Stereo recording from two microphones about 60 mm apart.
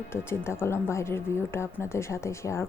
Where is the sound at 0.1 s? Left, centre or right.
Left.